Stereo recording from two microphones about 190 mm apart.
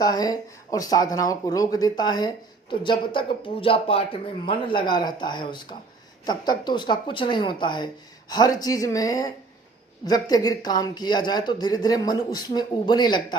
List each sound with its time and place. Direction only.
0.0 s speech: 20° left (ahead or behind)